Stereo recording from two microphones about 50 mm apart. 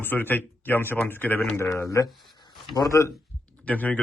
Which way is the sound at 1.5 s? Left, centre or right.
Left.